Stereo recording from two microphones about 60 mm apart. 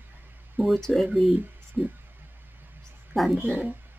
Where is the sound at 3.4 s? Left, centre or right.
Right.